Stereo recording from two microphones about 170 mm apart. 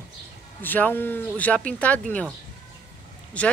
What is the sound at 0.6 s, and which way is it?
Speech, 10° left (ahead or behind).